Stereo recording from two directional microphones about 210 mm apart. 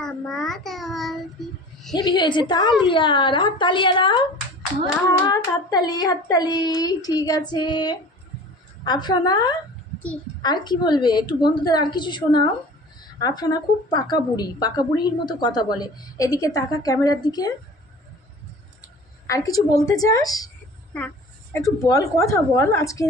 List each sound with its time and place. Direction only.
0.0 s child singing: centre (ahead or behind)
2.0 s a woman's voice: 20° left (ahead or behind)
5.2 s a woman's voice: 20° left (ahead or behind)
19.2 s a woman's voice: 15° left (ahead or behind)